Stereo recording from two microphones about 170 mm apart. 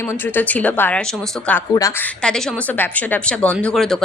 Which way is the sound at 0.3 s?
10° left (ahead or behind).